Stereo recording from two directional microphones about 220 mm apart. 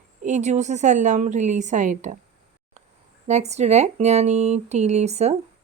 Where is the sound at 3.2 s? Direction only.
30° right (ahead or behind).